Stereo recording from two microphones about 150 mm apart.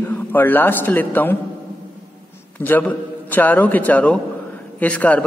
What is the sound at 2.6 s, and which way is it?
A man's voice, 10° left (ahead or behind).